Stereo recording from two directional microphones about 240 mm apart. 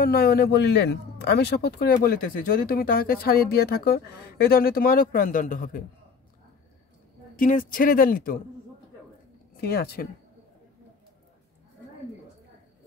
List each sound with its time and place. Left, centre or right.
0.0 s a man's voice: left
7.3 s a man's voice: left
9.6 s a man's voice: left